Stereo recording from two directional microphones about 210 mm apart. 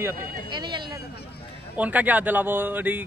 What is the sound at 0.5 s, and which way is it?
Speech, 20° right (ahead or behind).